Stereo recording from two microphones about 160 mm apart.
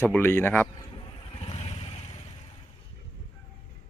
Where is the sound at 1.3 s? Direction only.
40° left (ahead or behind).